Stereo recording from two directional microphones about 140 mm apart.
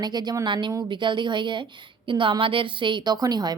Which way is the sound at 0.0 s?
30° right (ahead or behind).